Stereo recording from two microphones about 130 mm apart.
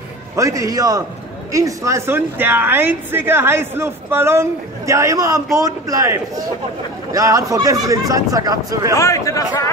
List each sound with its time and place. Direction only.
0.4 s speech: 25° right (ahead or behind)
8.9 s a man's voice: 25° left (ahead or behind)